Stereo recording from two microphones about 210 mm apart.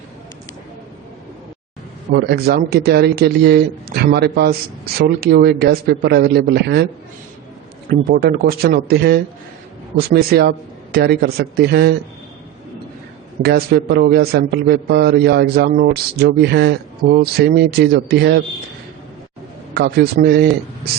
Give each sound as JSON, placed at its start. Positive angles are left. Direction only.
{"t": 2.1, "sound": "a man's voice", "side_deg": -50}
{"t": 7.9, "sound": "a man's voice", "side_deg": -45}
{"t": 13.4, "sound": "a man's voice", "side_deg": -50}
{"t": 19.7, "sound": "a man's voice", "side_deg": -50}